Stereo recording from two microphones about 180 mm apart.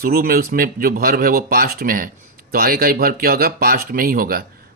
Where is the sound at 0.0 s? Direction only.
55° right (ahead or behind).